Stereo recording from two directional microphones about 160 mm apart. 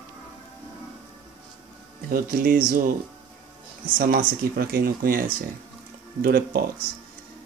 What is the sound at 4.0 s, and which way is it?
Speech, 65° right (ahead or behind).